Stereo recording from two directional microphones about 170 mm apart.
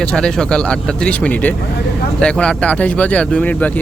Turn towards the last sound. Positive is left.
turn(degrees=10)  # may be behind; listen again after turning